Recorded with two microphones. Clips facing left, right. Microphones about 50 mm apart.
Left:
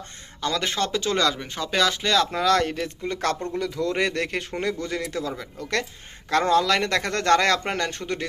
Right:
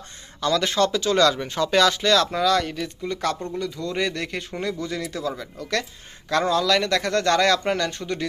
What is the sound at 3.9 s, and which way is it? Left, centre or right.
Speech, left.